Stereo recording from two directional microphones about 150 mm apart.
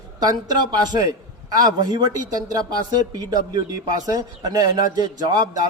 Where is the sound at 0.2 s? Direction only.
25° right (ahead or behind).